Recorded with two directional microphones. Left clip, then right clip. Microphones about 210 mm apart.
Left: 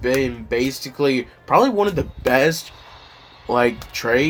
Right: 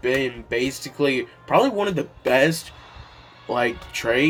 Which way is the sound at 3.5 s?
45° left (ahead or behind).